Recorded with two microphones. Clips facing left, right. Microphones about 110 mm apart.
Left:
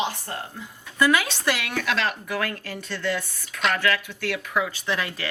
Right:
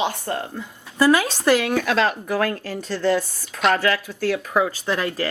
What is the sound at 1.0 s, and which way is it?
Speech, 35° right (ahead or behind).